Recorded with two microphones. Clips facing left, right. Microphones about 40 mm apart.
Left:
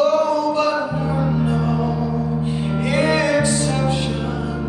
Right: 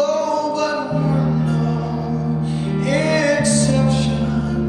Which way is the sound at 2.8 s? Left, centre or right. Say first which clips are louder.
Right 1 dB; centre.